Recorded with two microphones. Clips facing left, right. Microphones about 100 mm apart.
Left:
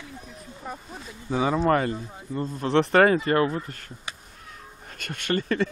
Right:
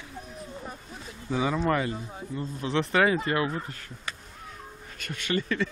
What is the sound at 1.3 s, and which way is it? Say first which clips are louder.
Speech: left 4 dB; 30° left (ahead or behind).